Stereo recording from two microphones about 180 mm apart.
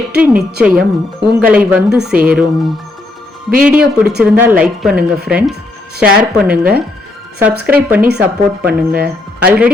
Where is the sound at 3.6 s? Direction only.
5° right (ahead or behind).